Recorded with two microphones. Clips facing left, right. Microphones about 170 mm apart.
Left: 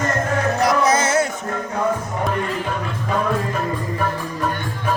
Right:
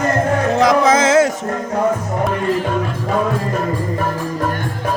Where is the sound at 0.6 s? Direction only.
90° right.